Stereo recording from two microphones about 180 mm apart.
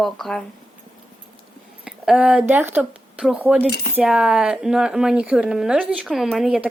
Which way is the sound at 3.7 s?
65° left (ahead or behind).